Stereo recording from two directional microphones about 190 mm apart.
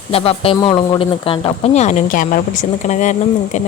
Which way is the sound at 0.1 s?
30° left (ahead or behind).